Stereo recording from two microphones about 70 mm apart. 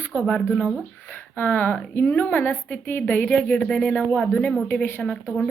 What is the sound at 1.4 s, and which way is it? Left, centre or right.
A woman's voice, left.